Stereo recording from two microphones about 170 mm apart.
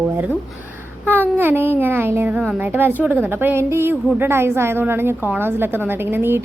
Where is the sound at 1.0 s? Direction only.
10° right (ahead or behind).